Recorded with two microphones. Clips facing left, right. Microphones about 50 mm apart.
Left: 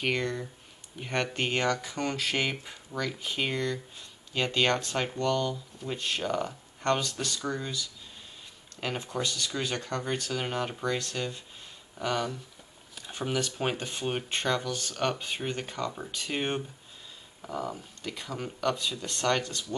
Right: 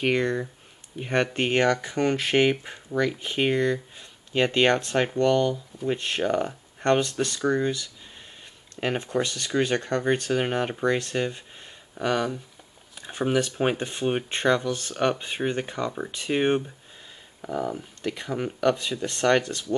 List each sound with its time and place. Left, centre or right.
0.0 s speech: right
17.7 s speech: right